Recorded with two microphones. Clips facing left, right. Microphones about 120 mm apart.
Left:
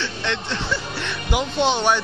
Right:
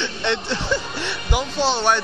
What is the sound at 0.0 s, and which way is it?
Speech, 25° right (ahead or behind).